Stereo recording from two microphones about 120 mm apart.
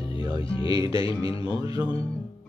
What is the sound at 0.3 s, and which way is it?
Music, 45° left (ahead or behind).